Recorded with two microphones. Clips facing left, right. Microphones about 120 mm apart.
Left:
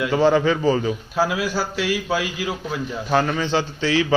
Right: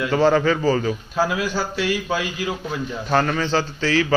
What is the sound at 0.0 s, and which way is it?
A man's voice, 15° left (ahead or behind).